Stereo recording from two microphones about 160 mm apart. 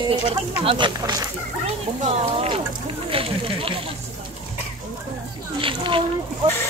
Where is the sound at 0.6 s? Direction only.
30° right (ahead or behind).